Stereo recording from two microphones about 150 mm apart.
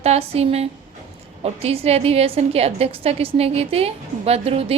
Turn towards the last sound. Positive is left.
turn(degrees=-40)  # may be behind; listen again after turning